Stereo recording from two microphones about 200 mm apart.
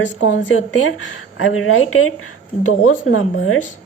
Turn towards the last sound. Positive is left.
turn(degrees=90)